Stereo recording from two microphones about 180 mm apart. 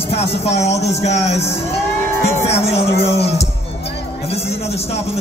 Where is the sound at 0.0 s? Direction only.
35° left (ahead or behind).